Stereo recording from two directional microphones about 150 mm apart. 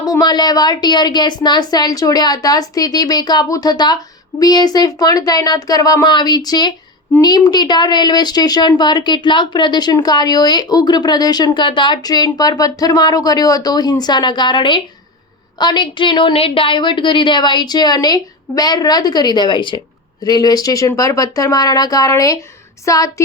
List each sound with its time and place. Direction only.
0.0 s a woman's voice: 25° left (ahead or behind)